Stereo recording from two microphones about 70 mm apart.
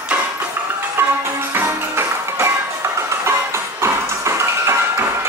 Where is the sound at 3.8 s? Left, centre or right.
Right.